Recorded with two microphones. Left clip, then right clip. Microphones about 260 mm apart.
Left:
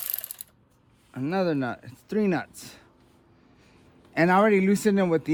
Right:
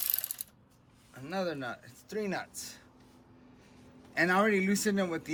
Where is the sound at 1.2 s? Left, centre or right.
Left.